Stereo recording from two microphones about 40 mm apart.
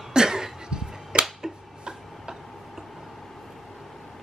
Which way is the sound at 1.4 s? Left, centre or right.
Centre.